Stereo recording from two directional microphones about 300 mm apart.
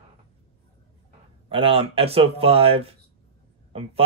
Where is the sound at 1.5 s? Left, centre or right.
Centre.